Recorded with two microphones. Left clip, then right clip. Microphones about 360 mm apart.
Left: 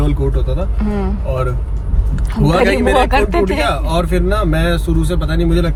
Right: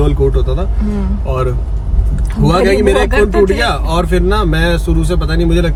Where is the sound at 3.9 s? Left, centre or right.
Centre.